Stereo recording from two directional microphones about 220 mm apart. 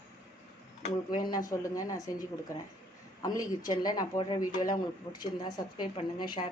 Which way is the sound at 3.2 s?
15° left (ahead or behind).